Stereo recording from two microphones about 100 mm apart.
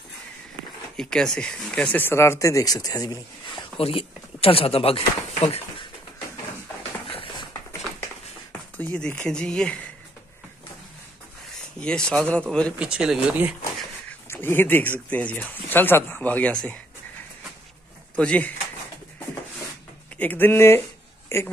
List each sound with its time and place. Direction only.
0.9 s speech: 5° left (ahead or behind); by 3.2 s 40° left (ahead or behind)
3.4 s speech: 60° left (ahead or behind); by 5.6 s 80° left
8.7 s speech: 15° left (ahead or behind)
11.8 s speech: 10° left (ahead or behind)
12.7 s speech: 10° right (ahead or behind)
14.0 s speech: 25° left (ahead or behind)
18.1 s speech: 10° left (ahead or behind)
20.2 s speech: 15° left (ahead or behind)